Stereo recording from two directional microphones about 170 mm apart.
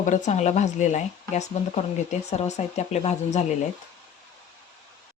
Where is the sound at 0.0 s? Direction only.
45° left (ahead or behind).